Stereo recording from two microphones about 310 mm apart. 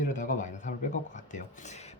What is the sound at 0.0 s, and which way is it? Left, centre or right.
A man's voice, left.